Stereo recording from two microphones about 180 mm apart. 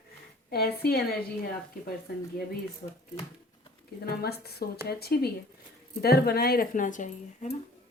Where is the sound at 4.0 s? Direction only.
60° left (ahead or behind); by 7.6 s 45° left (ahead or behind).